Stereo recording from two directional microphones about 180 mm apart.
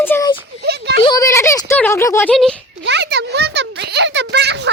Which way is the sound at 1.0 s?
20° left (ahead or behind).